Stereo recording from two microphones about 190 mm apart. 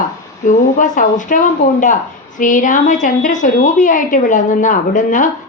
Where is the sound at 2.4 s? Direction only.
45° left (ahead or behind).